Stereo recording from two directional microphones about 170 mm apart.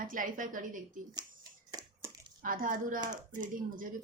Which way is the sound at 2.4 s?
55° right (ahead or behind).